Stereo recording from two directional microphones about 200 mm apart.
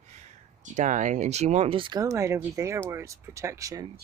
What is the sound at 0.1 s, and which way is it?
Speech, 35° right (ahead or behind).